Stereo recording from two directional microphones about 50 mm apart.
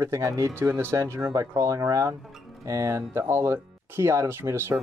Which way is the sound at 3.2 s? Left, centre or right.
Right.